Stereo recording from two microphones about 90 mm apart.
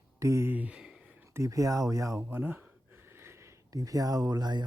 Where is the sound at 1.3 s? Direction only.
35° right (ahead or behind).